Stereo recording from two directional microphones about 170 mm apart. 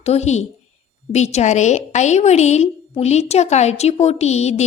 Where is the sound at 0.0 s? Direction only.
40° left (ahead or behind).